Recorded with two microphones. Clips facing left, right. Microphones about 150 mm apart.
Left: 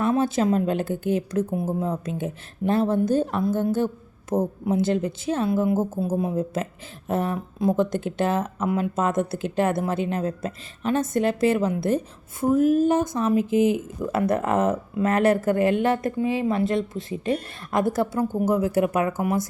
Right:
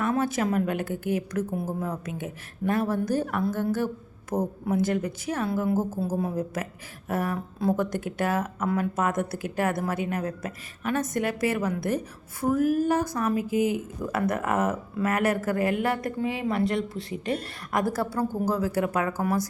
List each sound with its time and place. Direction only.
0.0 s speech: 25° left (ahead or behind)